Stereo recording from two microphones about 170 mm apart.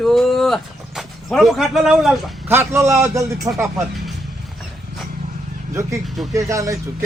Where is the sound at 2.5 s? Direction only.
15° right (ahead or behind).